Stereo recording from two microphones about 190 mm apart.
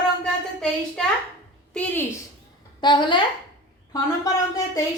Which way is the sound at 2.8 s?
25° left (ahead or behind).